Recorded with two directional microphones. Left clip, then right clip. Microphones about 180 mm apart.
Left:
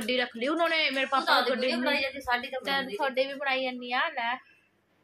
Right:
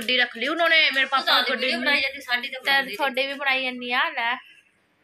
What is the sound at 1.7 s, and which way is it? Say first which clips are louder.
Speech: right 5 dB; 55° left (ahead or behind).